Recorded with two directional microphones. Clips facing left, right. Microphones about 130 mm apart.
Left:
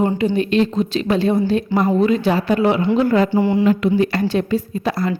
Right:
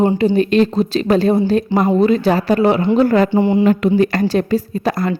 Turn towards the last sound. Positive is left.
turn(degrees=-50)  # may be behind; listen again after turning